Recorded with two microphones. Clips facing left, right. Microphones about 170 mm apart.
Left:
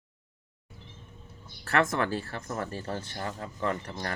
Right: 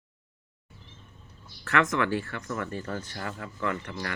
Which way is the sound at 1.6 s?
35° left (ahead or behind).